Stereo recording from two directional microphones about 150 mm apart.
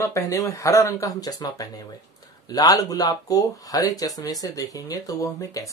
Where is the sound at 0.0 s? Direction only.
20° left (ahead or behind).